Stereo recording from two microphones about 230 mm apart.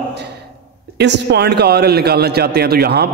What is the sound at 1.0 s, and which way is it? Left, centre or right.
A man's voice, right.